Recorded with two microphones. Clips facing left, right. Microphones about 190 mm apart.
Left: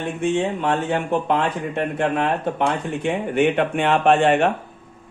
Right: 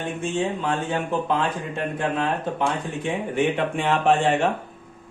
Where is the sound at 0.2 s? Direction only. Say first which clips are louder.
Left 5 dB; 60° left (ahead or behind).